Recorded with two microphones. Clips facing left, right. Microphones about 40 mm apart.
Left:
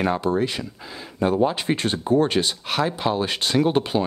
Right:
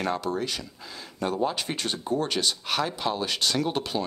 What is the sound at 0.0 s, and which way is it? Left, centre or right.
Speech, left.